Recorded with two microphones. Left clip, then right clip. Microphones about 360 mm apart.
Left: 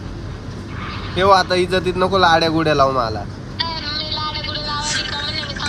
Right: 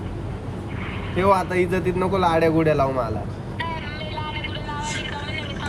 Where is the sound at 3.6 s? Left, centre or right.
Centre.